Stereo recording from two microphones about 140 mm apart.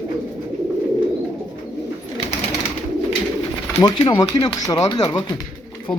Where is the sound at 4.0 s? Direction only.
30° left (ahead or behind).